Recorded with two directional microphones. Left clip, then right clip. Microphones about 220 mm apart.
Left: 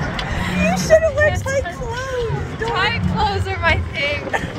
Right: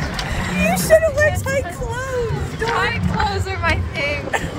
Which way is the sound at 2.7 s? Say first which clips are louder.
Left 1 dB; 25° left (ahead or behind).